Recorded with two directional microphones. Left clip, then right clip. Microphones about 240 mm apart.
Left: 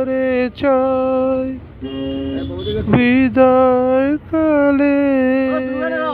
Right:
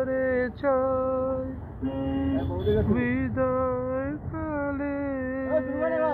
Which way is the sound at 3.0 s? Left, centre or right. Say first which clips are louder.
Left 14 dB; left.